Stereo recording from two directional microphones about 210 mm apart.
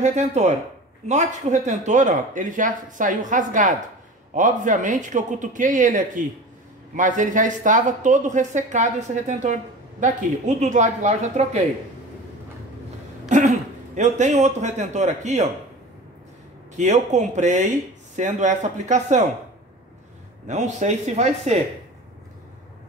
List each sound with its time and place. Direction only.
0.0 s speech: 35° right (ahead or behind)
13.3 s a sound: 35° right (ahead or behind)
13.9 s speech: 35° right (ahead or behind)
16.7 s speech: 35° right (ahead or behind)
20.4 s speech: 35° right (ahead or behind)